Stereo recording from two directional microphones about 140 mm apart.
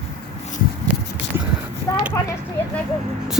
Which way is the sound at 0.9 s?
10° right (ahead or behind).